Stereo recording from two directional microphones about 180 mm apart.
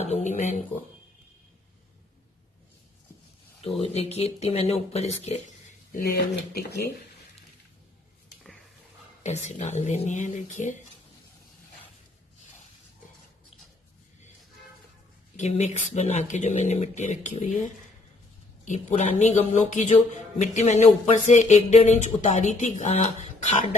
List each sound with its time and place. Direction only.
0.0 s speech: 40° left (ahead or behind)
3.8 s speech: 35° left (ahead or behind)
5.9 s speech: 60° left (ahead or behind)
9.2 s speech: 40° left (ahead or behind)
15.4 s speech: 40° left (ahead or behind)
18.7 s speech: 40° left (ahead or behind)